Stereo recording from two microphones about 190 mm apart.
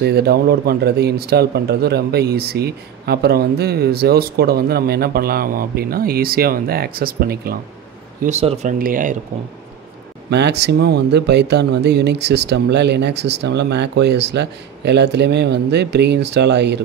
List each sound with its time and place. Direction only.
0.0 s speech: 55° right (ahead or behind)
8.2 s speech: 35° right (ahead or behind)
8.7 s speech: 45° right (ahead or behind)
10.3 s speech: 60° right (ahead or behind)